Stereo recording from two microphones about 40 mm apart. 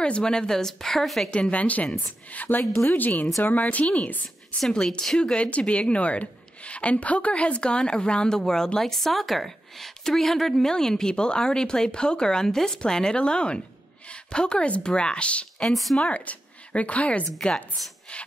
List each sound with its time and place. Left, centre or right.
0.0 s a woman's voice: left; by 1.3 s centre
1.3 s speech: left
4.6 s a woman's voice: centre; by 15.4 s left
15.7 s speech: centre
16.0 s speech: left
17.4 s a woman's voice: centre
18.1 s music: left